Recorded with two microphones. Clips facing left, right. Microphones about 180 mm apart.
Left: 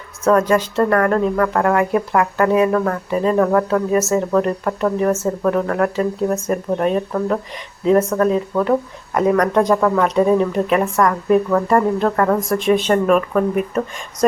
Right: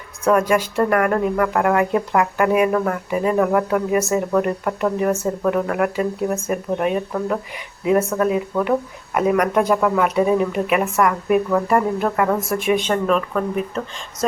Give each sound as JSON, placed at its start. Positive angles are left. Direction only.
{"t": 0.3, "sound": "speech", "side_deg": -10}
{"t": 12.9, "sound": "speech", "side_deg": 10}